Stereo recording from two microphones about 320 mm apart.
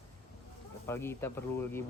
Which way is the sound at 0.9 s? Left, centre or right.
Centre.